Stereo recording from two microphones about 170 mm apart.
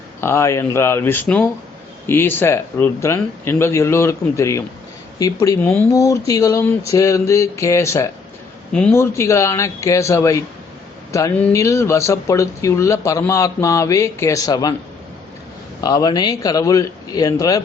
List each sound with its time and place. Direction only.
0.2 s a man's voice: 15° left (ahead or behind)
15.8 s a man's voice: 20° left (ahead or behind)